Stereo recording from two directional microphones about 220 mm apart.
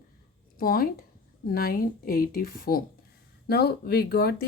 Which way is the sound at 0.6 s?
40° left (ahead or behind).